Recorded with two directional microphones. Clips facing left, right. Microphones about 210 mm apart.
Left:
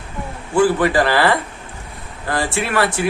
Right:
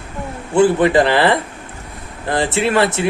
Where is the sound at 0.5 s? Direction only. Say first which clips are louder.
Right 3 dB; 20° right (ahead or behind).